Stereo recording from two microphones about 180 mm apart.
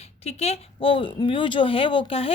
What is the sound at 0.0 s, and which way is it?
A woman's voice, 35° left (ahead or behind).